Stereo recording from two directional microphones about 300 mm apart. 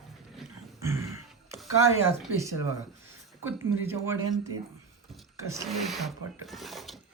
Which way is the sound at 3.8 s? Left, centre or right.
Centre.